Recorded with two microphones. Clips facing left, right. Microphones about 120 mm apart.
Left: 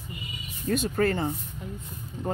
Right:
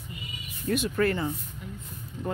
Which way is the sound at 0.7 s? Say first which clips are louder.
Left 1 dB; 35° left (ahead or behind).